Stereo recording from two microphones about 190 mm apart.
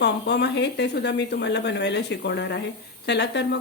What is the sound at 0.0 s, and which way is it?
A woman's voice, 65° left (ahead or behind).